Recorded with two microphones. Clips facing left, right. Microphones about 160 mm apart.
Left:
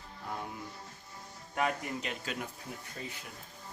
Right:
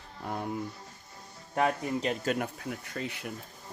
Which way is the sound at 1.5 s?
35° right (ahead or behind).